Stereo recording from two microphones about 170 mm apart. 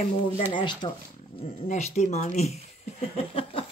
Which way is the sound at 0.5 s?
30° left (ahead or behind).